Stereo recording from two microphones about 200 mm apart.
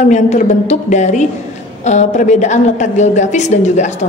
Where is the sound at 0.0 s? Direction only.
35° left (ahead or behind).